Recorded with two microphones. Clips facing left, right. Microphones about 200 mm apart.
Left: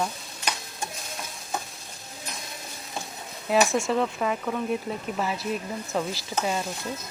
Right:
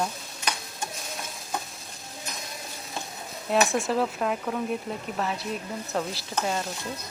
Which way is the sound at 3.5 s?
Centre (ahead or behind).